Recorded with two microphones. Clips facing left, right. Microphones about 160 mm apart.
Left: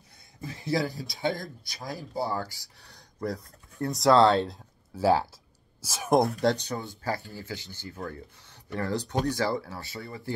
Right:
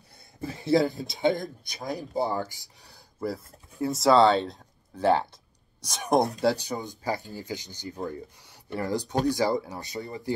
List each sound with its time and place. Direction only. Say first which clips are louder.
0.4 s speech: right 6 dB; 25° right (ahead or behind)
3.2 s speech: right 1 dB; 5° right (ahead or behind)
6.4 s speech: right 1 dB; 10° right (ahead or behind)